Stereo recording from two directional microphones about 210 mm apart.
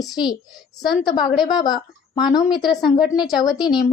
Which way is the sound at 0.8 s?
Centre (ahead or behind).